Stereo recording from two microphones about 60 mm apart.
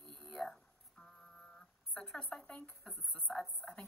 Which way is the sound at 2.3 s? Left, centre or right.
Centre.